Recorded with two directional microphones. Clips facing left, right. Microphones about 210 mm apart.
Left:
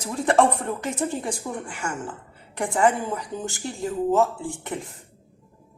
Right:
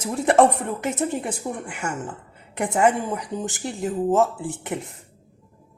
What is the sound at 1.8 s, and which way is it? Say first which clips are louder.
A woman's voice: right 1 dB; 20° right (ahead or behind).